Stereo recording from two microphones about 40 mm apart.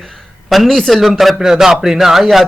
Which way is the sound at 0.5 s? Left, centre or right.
Centre.